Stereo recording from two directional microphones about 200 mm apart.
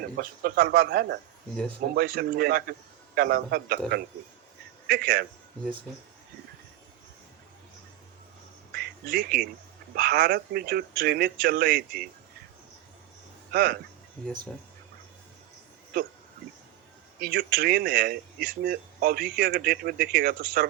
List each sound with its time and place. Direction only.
0.2 s speech: 50° right (ahead or behind)
8.7 s a sound: 50° right (ahead or behind)
9.9 s speech: 50° right (ahead or behind)
13.5 s speech: 50° right (ahead or behind)
17.2 s speech: 50° right (ahead or behind)